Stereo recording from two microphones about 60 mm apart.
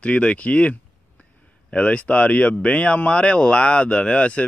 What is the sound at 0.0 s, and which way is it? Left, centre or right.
Speech, centre.